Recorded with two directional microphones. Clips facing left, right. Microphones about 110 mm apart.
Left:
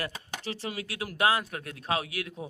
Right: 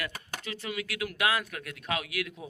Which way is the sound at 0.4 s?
30° left (ahead or behind).